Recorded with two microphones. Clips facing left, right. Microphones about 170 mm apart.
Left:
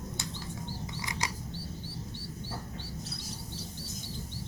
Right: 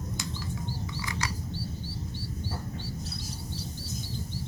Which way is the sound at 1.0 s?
20° left (ahead or behind).